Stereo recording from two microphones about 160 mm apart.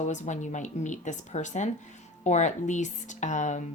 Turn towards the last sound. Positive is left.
turn(degrees=50)  # may be behind; listen again after turning